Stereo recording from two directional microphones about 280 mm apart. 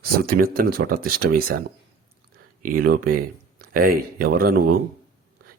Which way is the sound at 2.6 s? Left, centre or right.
Right.